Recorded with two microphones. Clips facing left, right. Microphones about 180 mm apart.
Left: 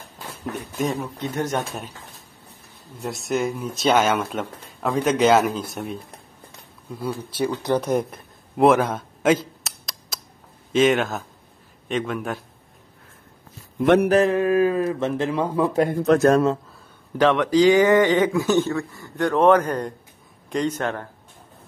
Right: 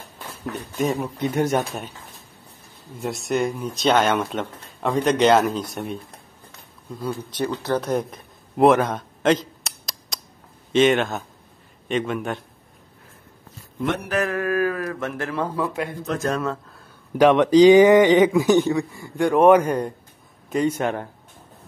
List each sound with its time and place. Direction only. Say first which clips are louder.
0.9 s speech: right 4 dB; 10° right (ahead or behind)
3.0 s speech: right 1 dB; centre (ahead or behind)
14.0 s mantra: left 7 dB; 35° left (ahead or behind)
14.3 s speech: left 4 dB; 20° left (ahead or behind)
15.7 s mantra: left 8 dB; 40° left (ahead or behind)
16.1 s speech: left 9 dB; 65° left (ahead or behind)
17.2 s speech: right 4 dB; 20° right (ahead or behind)